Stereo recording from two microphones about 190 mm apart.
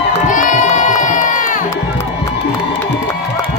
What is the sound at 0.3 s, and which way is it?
Crowd, 45° left (ahead or behind).